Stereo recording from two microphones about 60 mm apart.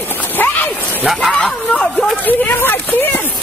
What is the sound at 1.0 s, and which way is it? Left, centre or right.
Speech, centre.